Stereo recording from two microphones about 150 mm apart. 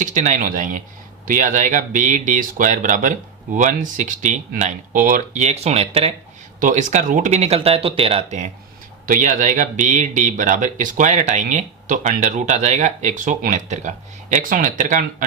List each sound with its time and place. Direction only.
0.0 s speech: 55° right (ahead or behind)
6.6 s speech: 60° right (ahead or behind)
9.0 s speech: 60° right (ahead or behind)